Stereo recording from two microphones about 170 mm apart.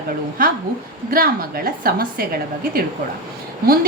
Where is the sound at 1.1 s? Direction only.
60° right (ahead or behind).